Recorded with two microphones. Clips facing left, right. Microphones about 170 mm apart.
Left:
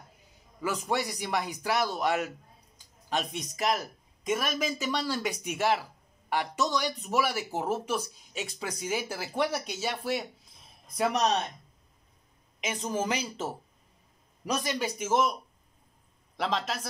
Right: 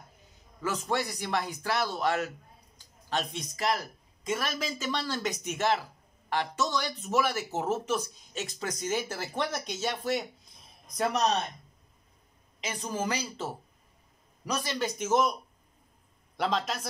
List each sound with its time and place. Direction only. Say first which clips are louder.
0.6 s speech: even; 15° left (ahead or behind)
12.5 s a woman's voice: left 3 dB; 20° left (ahead or behind)
16.3 s a man's voice: right 1 dB; centre (ahead or behind)